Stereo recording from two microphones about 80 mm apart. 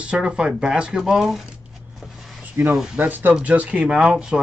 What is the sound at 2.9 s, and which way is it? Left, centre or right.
Speech, right.